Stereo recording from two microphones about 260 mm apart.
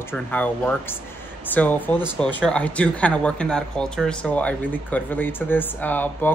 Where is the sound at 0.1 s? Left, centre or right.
Centre.